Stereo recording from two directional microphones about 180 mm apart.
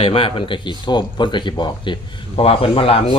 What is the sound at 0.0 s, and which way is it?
Speech, 30° left (ahead or behind).